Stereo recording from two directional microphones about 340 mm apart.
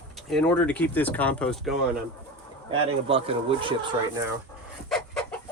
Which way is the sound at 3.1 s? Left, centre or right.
Centre.